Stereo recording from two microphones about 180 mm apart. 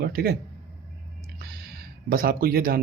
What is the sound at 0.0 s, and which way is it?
Speech, 55° right (ahead or behind).